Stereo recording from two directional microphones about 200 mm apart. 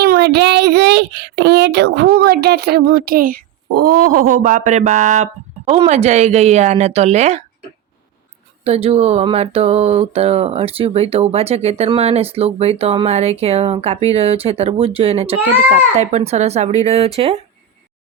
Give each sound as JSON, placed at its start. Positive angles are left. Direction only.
{"t": 0.0, "sound": "speech", "side_deg": -50}
{"t": 8.6, "sound": "a sound", "side_deg": -30}
{"t": 15.7, "sound": "speech", "side_deg": -35}